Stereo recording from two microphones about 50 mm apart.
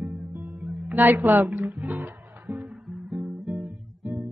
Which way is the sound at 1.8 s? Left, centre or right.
Right.